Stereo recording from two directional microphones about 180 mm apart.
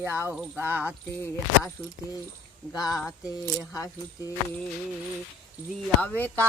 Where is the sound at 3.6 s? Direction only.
20° left (ahead or behind).